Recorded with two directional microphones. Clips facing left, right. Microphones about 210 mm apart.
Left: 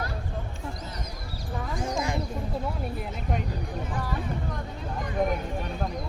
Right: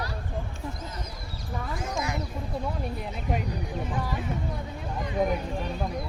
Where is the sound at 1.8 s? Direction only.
30° left (ahead or behind).